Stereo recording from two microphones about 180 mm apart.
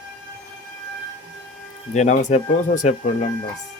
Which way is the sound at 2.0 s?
40° left (ahead or behind).